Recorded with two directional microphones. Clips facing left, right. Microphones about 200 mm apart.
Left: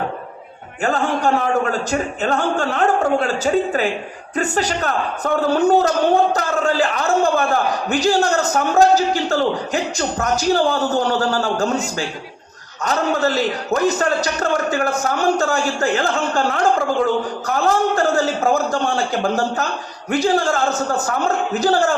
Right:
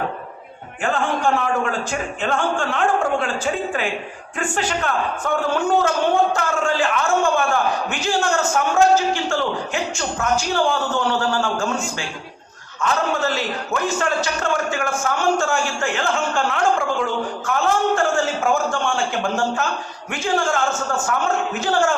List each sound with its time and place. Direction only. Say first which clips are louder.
0.8 s a man's voice: left 2 dB; 40° left (ahead or behind)